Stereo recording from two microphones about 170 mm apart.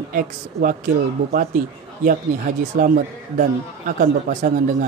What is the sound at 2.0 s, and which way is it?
A man's voice, 55° right (ahead or behind).